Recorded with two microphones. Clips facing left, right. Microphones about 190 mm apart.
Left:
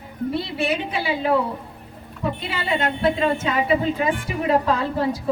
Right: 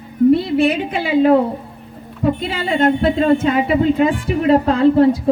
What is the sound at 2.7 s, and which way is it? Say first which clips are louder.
Speech: right 6 dB; 50° right (ahead or behind).